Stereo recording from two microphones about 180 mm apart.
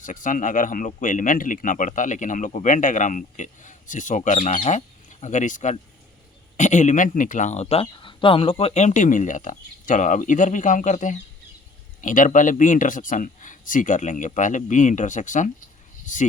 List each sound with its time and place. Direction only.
0.0 s speech: 45° left (ahead or behind)